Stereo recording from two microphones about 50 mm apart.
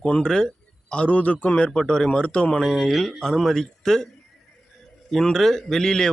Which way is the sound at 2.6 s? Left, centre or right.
Centre.